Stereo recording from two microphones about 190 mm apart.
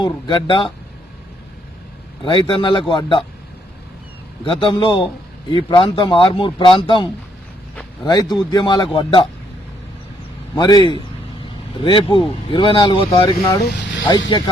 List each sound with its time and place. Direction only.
0.0 s speech: 25° left (ahead or behind)
2.2 s speech: 25° left (ahead or behind)
4.4 s speech: 25° left (ahead or behind)
10.5 s speech: 20° left (ahead or behind)
13.7 s speech: 65° left (ahead or behind)